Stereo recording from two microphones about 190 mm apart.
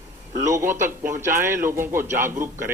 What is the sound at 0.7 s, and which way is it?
Speech, 45° right (ahead or behind).